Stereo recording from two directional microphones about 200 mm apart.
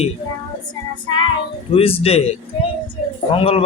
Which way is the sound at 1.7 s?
30° left (ahead or behind).